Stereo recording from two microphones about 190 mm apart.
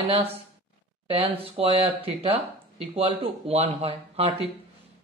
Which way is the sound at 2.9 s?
30° right (ahead or behind).